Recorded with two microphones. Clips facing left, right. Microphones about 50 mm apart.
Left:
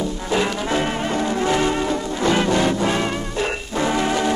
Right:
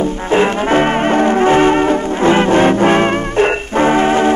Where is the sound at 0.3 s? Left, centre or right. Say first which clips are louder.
Right 8 dB; right.